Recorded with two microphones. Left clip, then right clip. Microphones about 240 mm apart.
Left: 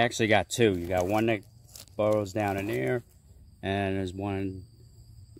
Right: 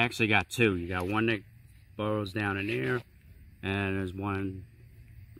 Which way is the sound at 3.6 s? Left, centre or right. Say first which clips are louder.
Left 3 dB; centre.